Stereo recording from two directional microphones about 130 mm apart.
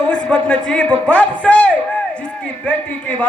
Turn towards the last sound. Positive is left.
turn(degrees=10)  # may be behind; listen again after turning